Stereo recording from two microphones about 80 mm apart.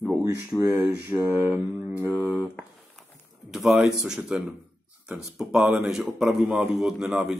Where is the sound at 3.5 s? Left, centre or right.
Centre.